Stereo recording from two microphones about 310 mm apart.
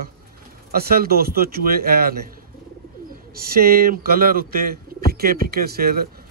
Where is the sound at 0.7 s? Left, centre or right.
Right.